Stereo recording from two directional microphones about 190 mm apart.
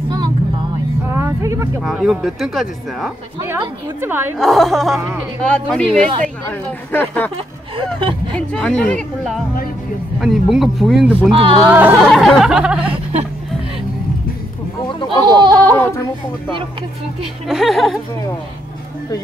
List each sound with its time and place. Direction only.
1.1 s music: 15° right (ahead or behind)
1.8 s speech: 5° right (ahead or behind)
3.3 s a woman's voice: 15° right (ahead or behind)
4.4 s speech: centre (ahead or behind)
7.7 s speech: 25° right (ahead or behind)
8.4 s speech: 5° left (ahead or behind)
11.3 s speech: 30° right (ahead or behind)
11.7 s a woman's voice: 10° right (ahead or behind)
15.0 s goat: 25° right (ahead or behind)
17.5 s speech: centre (ahead or behind)